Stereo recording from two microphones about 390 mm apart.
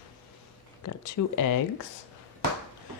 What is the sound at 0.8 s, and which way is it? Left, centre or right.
Speech, left.